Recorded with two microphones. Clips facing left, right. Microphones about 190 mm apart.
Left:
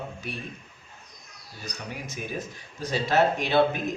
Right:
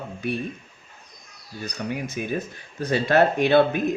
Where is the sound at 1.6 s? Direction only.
60° right (ahead or behind).